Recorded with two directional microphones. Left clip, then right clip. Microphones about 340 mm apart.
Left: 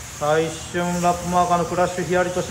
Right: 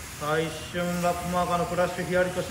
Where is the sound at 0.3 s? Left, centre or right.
Centre.